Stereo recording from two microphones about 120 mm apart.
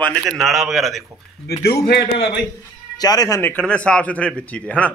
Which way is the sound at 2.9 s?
30° left (ahead or behind).